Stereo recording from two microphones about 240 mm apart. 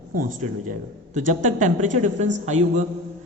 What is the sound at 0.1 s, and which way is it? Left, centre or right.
Speech, right.